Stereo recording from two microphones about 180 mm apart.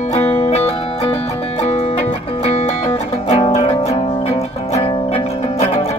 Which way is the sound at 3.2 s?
35° left (ahead or behind).